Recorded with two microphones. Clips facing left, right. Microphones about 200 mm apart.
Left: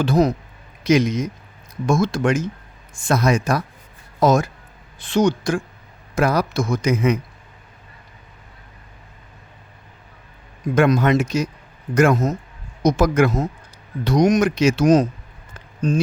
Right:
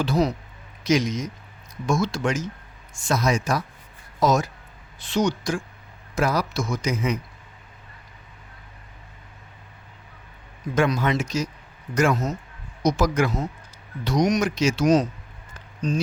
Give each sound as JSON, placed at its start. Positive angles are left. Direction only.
{"t": 0.0, "sound": "speech", "side_deg": 50}
{"t": 10.8, "sound": "speech", "side_deg": 55}